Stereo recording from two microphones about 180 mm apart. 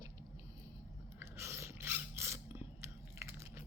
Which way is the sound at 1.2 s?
15° right (ahead or behind).